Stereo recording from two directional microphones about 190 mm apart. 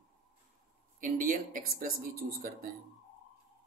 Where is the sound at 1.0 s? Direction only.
45° right (ahead or behind).